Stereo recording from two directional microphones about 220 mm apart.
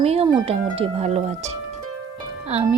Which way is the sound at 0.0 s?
25° right (ahead or behind).